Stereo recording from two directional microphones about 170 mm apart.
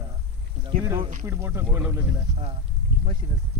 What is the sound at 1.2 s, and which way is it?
Speech, 15° right (ahead or behind).